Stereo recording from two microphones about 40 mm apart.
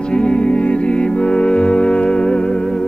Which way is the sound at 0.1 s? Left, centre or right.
Left.